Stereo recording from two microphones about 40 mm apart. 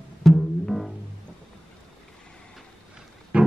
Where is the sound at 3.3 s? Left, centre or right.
Right.